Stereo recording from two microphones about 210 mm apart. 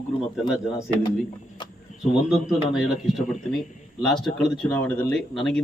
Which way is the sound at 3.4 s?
Centre (ahead or behind).